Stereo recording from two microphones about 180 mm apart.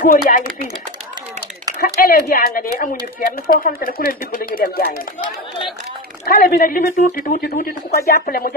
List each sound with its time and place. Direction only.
0.0 s a woman's voice: 50° left (ahead or behind)
2.0 s a woman's voice: 55° left (ahead or behind)